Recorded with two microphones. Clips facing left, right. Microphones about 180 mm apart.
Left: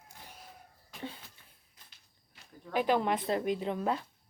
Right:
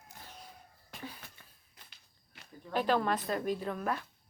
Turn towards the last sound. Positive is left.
turn(degrees=25)  # may be behind; listen again after turning